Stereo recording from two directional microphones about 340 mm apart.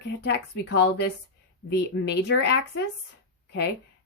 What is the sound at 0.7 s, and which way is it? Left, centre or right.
Speech, left.